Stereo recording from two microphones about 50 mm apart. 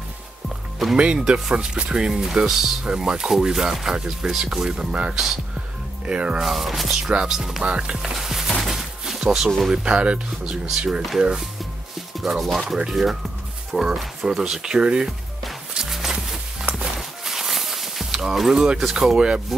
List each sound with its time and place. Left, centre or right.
0.9 s speech: centre
6.4 s speech: centre
7.6 s speech: right
8.0 s speech: centre
8.5 s a sound: centre
9.7 s speech: right
12.2 s speech: centre
15.7 s music: centre
16.7 s a sound: centre
18.8 s speech: centre
19.1 s speech: centre